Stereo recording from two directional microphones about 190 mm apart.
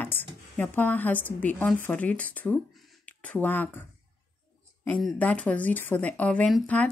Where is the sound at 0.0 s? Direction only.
10° left (ahead or behind).